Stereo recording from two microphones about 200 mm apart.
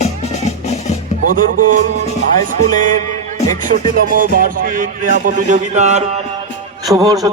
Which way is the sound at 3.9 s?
45° right (ahead or behind).